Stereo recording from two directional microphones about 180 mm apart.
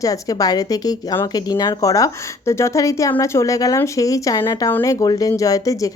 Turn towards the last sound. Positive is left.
turn(degrees=20)  # may be behind; listen again after turning